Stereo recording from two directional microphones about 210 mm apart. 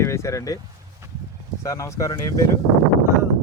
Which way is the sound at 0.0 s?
15° left (ahead or behind).